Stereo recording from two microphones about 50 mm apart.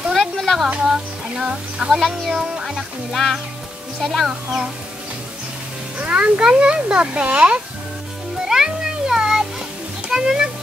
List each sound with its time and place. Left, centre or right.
0.1 s a sound: centre
0.8 s speech: centre
1.9 s speech: centre
4.3 s speech: centre
5.9 s speech: right
8.4 s music: centre
10.0 s speech: centre